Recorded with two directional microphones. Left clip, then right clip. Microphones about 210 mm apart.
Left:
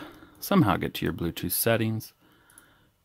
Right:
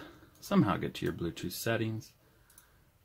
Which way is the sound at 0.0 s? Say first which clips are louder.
Left 8 dB; 45° left (ahead or behind).